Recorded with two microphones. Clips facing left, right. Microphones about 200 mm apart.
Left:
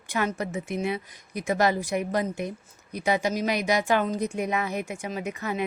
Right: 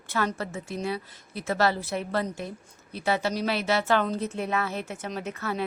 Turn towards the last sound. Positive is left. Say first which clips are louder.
# left 1 dB
turn(degrees=15)  # may be behind; listen again after turning